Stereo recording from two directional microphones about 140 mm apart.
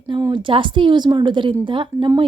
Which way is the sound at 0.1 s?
30° right (ahead or behind).